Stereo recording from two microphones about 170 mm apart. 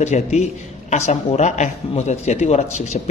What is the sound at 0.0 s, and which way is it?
A man's voice, 40° left (ahead or behind).